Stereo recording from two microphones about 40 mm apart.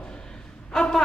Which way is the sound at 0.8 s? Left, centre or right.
Centre.